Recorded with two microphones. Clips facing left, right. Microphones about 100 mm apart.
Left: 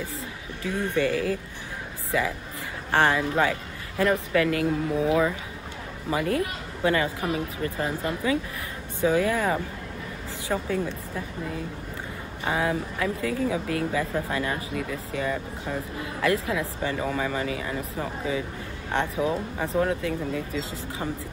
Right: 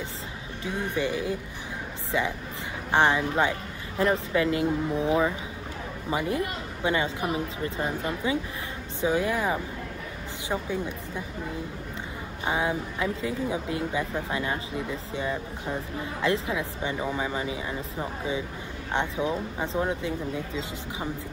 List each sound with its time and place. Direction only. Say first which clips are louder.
0.7 s a woman's voice: left 3 dB; 20° right (ahead or behind)
12.4 s speech: left 1 dB; 20° right (ahead or behind)